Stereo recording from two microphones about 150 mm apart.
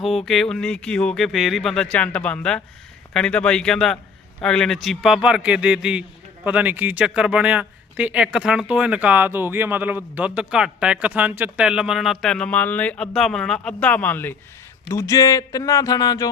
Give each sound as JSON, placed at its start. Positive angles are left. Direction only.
{"t": 0.3, "sound": "speech", "side_deg": 5}